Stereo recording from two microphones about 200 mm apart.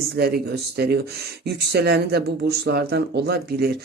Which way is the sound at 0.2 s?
50° right (ahead or behind).